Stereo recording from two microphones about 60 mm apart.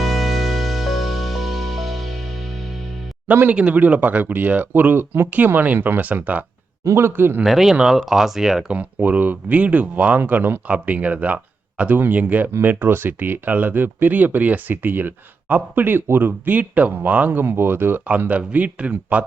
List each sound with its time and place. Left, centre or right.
0.0 s music: centre
3.2 s speech: right
3.5 s speech: centre
6.8 s speech: right
7.4 s speech: centre
8.7 s speech: right
18.2 s speech: right